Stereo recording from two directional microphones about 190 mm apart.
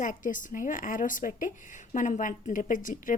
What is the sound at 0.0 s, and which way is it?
A woman's voice, 45° left (ahead or behind).